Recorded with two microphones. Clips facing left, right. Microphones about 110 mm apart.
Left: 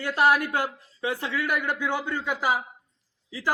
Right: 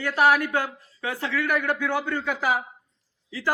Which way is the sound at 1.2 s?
15° left (ahead or behind).